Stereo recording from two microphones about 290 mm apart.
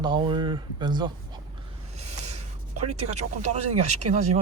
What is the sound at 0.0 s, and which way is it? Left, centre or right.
Speech, centre.